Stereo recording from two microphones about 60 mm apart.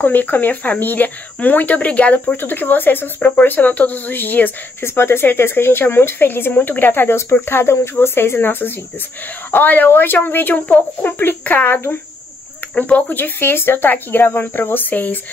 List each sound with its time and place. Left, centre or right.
0.0 s speech: left
4.8 s speech: left
12.7 s speech: left